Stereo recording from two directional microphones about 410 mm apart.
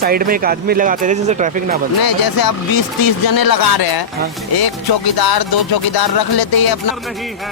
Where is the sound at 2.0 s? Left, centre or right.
Left.